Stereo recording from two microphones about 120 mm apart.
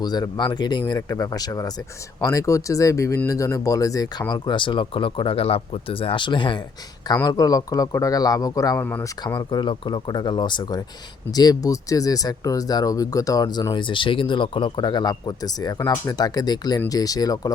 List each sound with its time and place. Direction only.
0.0 s speech: 35° left (ahead or behind)
4.3 s speech: 40° left (ahead or behind)
7.1 s speech: 30° left (ahead or behind)
8.8 s speech: 15° left (ahead or behind)
9.3 s speech: 35° left (ahead or behind)